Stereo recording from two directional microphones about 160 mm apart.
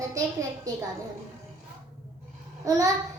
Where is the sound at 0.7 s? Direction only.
25° right (ahead or behind).